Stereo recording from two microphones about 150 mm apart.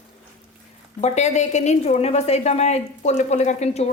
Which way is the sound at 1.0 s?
50° left (ahead or behind).